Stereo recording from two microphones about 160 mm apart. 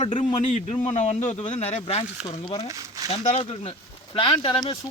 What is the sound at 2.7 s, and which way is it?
Speech, 20° right (ahead or behind).